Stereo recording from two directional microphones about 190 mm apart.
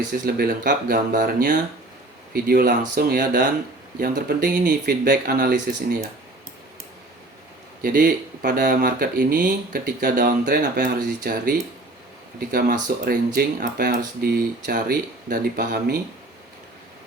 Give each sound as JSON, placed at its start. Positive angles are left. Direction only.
{"t": 0.3, "sound": "speech", "side_deg": -55}
{"t": 7.8, "sound": "speech", "side_deg": -50}